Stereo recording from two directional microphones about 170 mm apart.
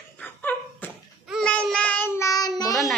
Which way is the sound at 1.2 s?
5° left (ahead or behind).